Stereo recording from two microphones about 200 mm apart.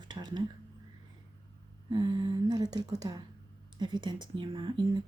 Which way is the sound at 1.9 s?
25° right (ahead or behind).